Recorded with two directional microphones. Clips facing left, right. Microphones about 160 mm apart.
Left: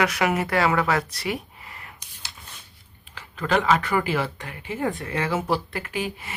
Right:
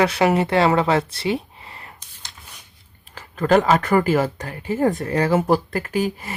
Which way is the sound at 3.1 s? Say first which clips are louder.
Right 7 dB; 45° right (ahead or behind).